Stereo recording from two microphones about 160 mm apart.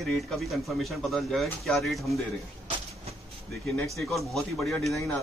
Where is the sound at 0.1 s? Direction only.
Centre (ahead or behind).